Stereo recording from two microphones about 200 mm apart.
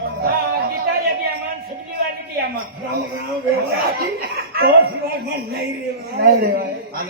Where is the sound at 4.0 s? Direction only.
50° right (ahead or behind).